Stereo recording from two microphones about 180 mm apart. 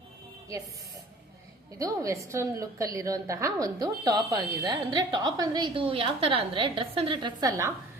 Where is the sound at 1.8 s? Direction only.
15° right (ahead or behind).